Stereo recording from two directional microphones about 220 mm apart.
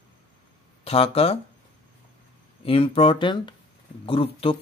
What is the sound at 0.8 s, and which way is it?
Speech, 25° left (ahead or behind).